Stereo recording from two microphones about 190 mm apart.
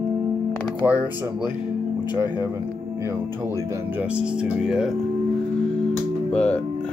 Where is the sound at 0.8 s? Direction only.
15° left (ahead or behind).